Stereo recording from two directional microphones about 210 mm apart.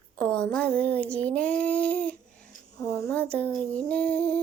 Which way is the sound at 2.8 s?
10° left (ahead or behind).